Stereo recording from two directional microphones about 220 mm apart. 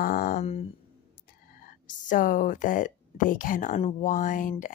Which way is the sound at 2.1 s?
35° left (ahead or behind).